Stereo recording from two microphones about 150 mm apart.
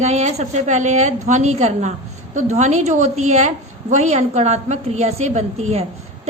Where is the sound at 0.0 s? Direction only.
50° right (ahead or behind).